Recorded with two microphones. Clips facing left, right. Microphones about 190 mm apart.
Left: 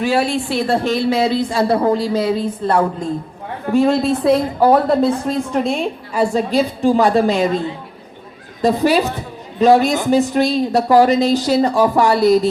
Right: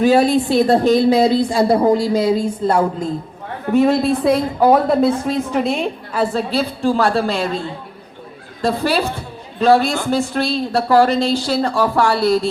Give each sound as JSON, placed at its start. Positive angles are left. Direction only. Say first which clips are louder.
{"t": 0.0, "sound": "a woman's voice", "louder": "right 4 dB", "side_deg": -40}
{"t": 1.5, "sound": "a woman's voice", "louder": "right 2 dB", "side_deg": -15}
{"t": 6.1, "sound": "a woman's voice", "louder": "left 3 dB", "side_deg": 15}
{"t": 8.6, "sound": "a woman's voice", "louder": "left 3 dB", "side_deg": 15}